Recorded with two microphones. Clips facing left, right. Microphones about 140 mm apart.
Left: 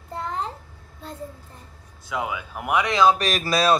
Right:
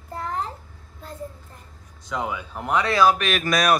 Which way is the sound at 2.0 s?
5° left (ahead or behind).